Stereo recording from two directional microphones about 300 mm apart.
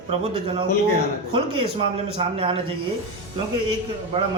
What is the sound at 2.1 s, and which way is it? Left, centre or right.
Speech, centre.